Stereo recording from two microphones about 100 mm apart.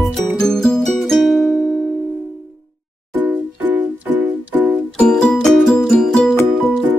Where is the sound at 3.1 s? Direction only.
25° right (ahead or behind).